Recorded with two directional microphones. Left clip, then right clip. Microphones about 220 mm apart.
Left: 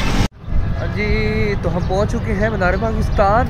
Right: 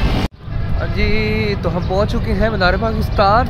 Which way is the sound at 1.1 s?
50° right (ahead or behind).